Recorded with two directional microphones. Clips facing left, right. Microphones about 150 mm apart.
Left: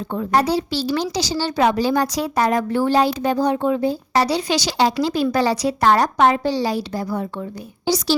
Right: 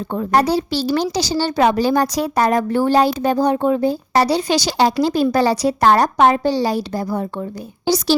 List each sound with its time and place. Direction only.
0.1 s a child's voice: 40° right (ahead or behind)